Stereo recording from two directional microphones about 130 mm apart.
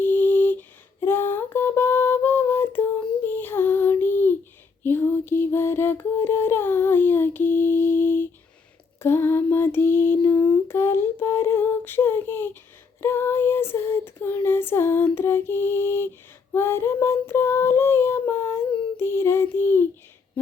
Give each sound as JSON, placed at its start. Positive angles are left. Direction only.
{"t": 0.0, "sound": "lullaby", "side_deg": 15}
{"t": 1.0, "sound": "a sound", "side_deg": 15}
{"t": 3.2, "sound": "female singing", "side_deg": 15}
{"t": 4.8, "sound": "mantra", "side_deg": 15}
{"t": 9.0, "sound": "lullaby", "side_deg": 20}
{"t": 13.0, "sound": "child singing", "side_deg": 20}
{"t": 16.5, "sound": "female singing", "side_deg": 20}